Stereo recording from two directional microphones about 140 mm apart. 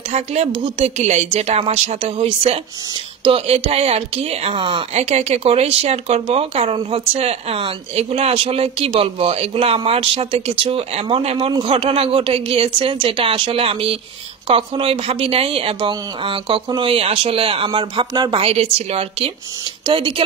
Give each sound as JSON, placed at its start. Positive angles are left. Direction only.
{"t": 0.1, "sound": "speech", "side_deg": -50}
{"t": 18.4, "sound": "speech", "side_deg": -45}